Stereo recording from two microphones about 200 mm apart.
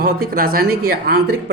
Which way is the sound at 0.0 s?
45° right (ahead or behind).